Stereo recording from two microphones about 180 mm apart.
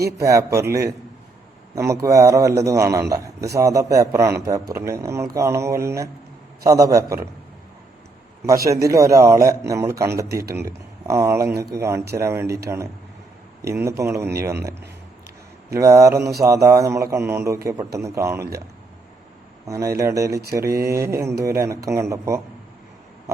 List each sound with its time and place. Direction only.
0.2 s a man's voice: 15° right (ahead or behind)
8.4 s a man's voice: 20° right (ahead or behind)
13.6 s a man's voice: 15° right (ahead or behind)
19.6 s a man's voice: 15° right (ahead or behind)